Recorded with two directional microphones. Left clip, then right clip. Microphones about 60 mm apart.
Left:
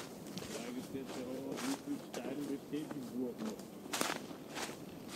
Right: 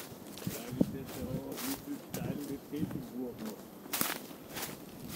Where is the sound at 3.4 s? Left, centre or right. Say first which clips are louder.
Even; right.